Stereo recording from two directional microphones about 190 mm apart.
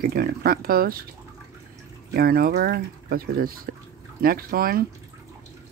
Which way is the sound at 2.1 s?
50° right (ahead or behind).